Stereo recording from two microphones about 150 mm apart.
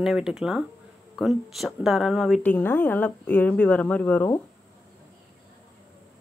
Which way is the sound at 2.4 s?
10° left (ahead or behind).